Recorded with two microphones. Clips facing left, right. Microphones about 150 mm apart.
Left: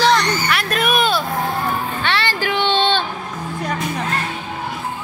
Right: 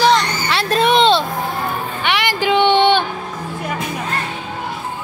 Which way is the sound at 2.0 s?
15° right (ahead or behind).